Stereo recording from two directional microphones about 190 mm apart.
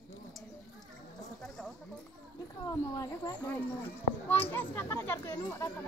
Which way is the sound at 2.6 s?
15° left (ahead or behind).